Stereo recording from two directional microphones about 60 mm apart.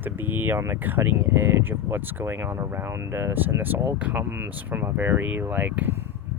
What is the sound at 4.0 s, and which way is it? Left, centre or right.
Speech, right.